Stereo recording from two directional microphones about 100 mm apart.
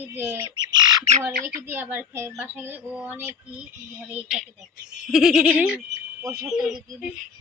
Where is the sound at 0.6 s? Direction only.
45° right (ahead or behind).